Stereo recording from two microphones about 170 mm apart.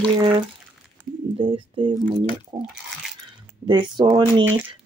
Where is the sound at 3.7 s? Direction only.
25° right (ahead or behind).